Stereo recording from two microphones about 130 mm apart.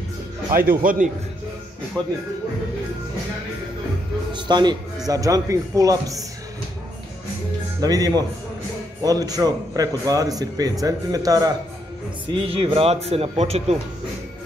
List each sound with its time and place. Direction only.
0.7 s a man's voice: 90° right
2.0 s speech: 10° left (ahead or behind)
4.3 s a man's voice: 35° right (ahead or behind)
7.8 s a man's voice: 30° right (ahead or behind)
12.3 s speech: 45° right (ahead or behind)